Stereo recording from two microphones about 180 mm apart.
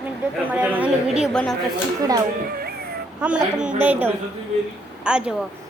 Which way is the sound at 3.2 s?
5° right (ahead or behind).